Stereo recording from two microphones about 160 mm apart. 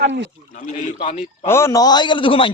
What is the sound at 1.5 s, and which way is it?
A man's voice, 15° left (ahead or behind).